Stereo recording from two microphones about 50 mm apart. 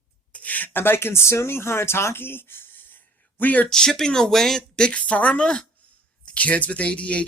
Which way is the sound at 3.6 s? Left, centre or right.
Centre.